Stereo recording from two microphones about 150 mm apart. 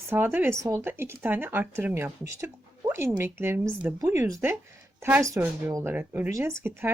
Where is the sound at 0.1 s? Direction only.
15° right (ahead or behind).